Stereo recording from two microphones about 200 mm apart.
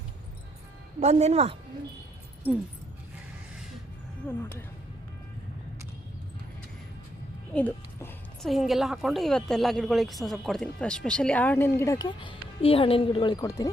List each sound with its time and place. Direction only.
0.9 s speech: 35° right (ahead or behind)
7.5 s a woman's voice: 10° left (ahead or behind)
12.0 s speech: 25° left (ahead or behind)